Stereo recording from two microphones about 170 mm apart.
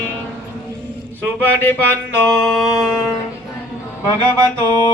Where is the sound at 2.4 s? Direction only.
Centre (ahead or behind).